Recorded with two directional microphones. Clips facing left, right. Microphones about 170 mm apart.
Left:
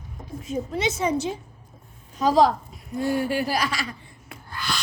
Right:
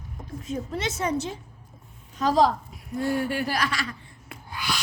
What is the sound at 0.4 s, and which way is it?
A child's voice, centre (ahead or behind).